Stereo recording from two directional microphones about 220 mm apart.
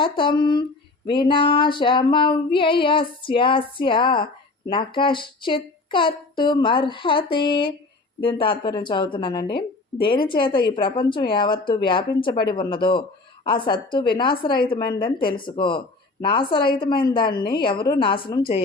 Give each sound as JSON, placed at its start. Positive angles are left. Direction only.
{"t": 0.0, "sound": "female singing", "side_deg": 20}